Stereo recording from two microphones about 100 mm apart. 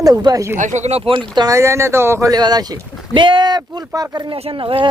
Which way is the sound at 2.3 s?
45° right (ahead or behind).